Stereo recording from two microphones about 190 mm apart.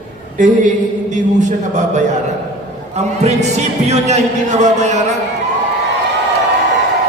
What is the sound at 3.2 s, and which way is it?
Speech, 35° right (ahead or behind).